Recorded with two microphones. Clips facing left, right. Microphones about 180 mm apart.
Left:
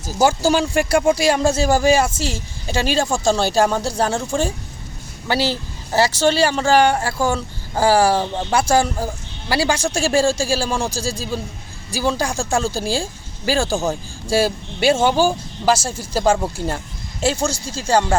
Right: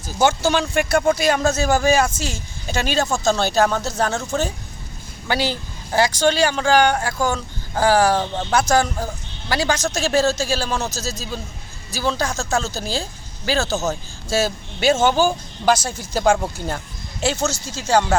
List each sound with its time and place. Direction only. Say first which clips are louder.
0.2 s speech: left 2 dB; 35° left (ahead or behind)
0.9 s speech: left 2 dB; 10° left (ahead or behind)
1.5 s speech: left 2 dB; 30° left (ahead or behind)
2.0 s speech: left 3 dB; 5° left (ahead or behind)
5.9 s speech: left 1 dB; 5° left (ahead or behind)
15.9 s speech: left 2 dB; 30° left (ahead or behind)
16.2 s speech: even; 5° left (ahead or behind)
17.5 s speech: left 1 dB; 30° left (ahead or behind)